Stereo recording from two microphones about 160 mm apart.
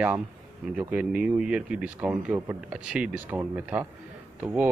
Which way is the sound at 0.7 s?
10° right (ahead or behind).